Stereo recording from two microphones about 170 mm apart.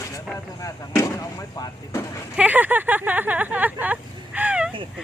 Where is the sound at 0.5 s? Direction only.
20° left (ahead or behind).